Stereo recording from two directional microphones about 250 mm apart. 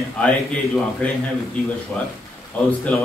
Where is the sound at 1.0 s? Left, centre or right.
Centre.